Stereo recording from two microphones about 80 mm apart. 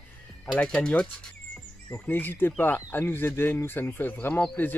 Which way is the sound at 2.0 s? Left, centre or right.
Left.